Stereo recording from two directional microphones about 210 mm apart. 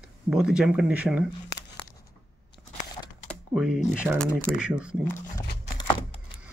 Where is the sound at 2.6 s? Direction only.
5° right (ahead or behind).